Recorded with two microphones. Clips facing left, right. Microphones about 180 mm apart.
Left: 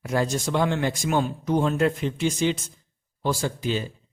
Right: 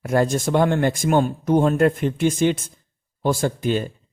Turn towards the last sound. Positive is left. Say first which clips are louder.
# right 5 dB
turn(degrees=-55)  # may be behind; listen again after turning